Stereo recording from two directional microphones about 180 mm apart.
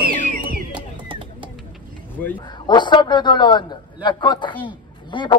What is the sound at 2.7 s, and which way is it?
A man's voice, 25° left (ahead or behind).